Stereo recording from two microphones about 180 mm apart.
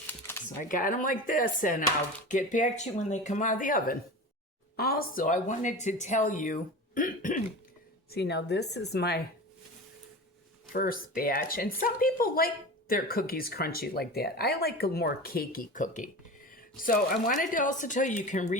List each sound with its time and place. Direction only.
0.1 s a sound: 15° left (ahead or behind)
0.7 s speech: 50° left (ahead or behind)
8.1 s speech: 65° left (ahead or behind)
10.7 s speech: 50° left (ahead or behind)